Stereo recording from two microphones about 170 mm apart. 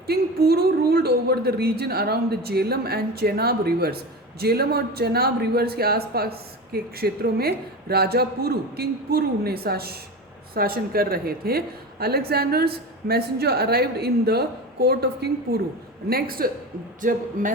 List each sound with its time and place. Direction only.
0.1 s a woman's voice: 65° right (ahead or behind)